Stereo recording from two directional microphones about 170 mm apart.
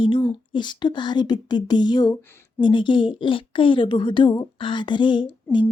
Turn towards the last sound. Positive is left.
turn(degrees=25)  # may be behind; listen again after turning